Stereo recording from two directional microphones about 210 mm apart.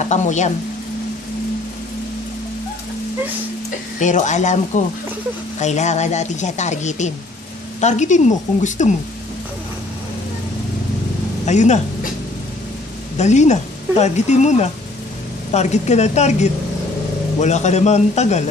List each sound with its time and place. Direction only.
0.0 s speech: 35° left (ahead or behind)
4.0 s speech: 35° left (ahead or behind)
11.4 s speech: 35° left (ahead or behind)
13.2 s speech: 35° left (ahead or behind)